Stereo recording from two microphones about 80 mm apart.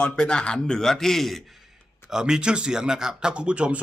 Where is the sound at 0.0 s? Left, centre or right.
Centre.